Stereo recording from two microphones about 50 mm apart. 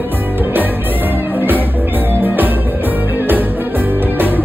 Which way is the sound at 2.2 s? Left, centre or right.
Right.